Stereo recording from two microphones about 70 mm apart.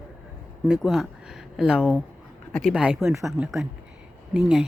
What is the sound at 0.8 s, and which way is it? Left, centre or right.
Speech, centre.